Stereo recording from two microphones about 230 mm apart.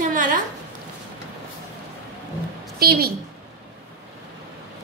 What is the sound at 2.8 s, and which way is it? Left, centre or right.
Speech, right.